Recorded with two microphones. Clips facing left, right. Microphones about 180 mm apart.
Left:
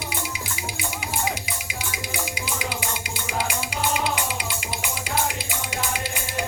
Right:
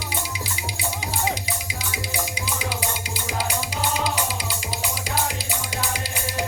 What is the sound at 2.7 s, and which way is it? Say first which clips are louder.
Music: right 1 dB; 35° right (ahead or behind).